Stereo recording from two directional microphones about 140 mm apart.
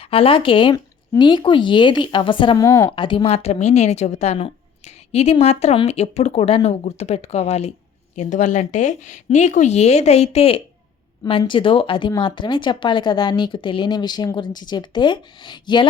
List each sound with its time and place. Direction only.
0.0 s speech: 40° left (ahead or behind)
2.6 s a woman's voice: 20° left (ahead or behind)
2.9 s speech: 35° left (ahead or behind)